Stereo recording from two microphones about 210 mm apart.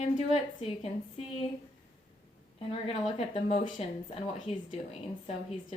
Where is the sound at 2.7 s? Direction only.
25° left (ahead or behind).